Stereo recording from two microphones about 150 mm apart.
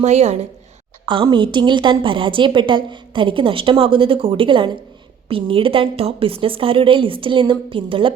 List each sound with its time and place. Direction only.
0.0 s a woman's voice: 50° right (ahead or behind)
1.0 s a woman's voice: 30° right (ahead or behind)